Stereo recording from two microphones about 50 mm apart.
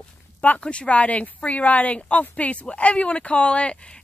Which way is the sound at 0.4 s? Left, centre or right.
Left.